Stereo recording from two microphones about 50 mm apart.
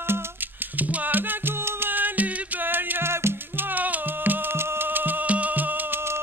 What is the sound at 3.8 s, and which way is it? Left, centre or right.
Music, right.